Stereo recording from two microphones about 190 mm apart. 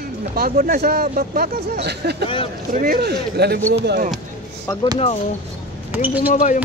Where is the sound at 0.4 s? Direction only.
55° right (ahead or behind).